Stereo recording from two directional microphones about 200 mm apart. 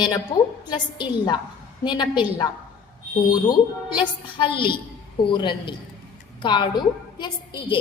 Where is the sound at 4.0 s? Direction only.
25° left (ahead or behind).